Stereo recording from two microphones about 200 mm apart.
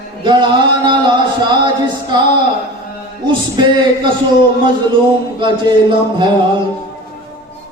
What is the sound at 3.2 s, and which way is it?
Speech, 25° right (ahead or behind).